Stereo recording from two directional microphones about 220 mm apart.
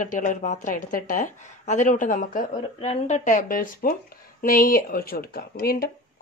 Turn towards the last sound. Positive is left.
turn(degrees=45)  # may be behind; listen again after turning